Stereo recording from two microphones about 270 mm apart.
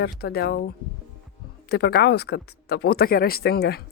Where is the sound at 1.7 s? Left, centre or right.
Left.